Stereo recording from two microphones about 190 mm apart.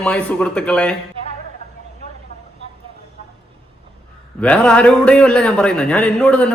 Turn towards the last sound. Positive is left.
turn(degrees=5)  # may be behind; listen again after turning